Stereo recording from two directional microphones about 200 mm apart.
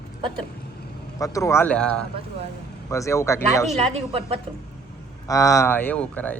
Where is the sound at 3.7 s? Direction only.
30° right (ahead or behind).